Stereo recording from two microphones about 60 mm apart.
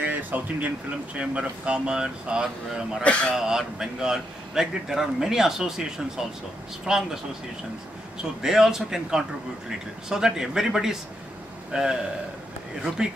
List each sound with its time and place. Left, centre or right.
0.0 s a sound: right
1.2 s speech: centre
3.0 s speech: centre
3.3 s speech: centre
6.9 s speech: centre
8.2 s speech: centre